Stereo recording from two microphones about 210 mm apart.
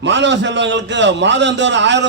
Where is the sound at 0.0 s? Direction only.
55° right (ahead or behind).